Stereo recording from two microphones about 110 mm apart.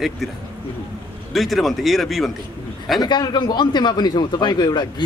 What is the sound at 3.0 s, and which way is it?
Speech, 40° left (ahead or behind).